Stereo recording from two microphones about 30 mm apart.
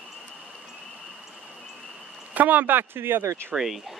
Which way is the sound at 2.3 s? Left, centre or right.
Right.